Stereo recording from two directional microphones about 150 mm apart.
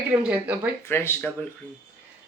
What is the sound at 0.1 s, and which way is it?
Speech, 10° right (ahead or behind).